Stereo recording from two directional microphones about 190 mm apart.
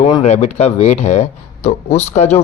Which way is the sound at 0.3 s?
35° left (ahead or behind).